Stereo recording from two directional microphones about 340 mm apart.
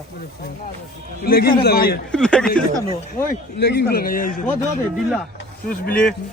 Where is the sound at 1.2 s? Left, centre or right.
Left.